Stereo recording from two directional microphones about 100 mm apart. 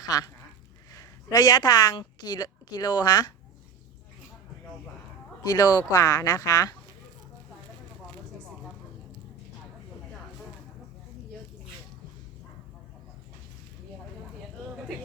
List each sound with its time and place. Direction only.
0.0 s a woman's voice: 40° left (ahead or behind)
5.4 s speech: 40° left (ahead or behind)